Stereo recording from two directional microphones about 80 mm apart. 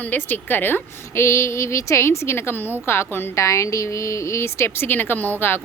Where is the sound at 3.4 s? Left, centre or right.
Left.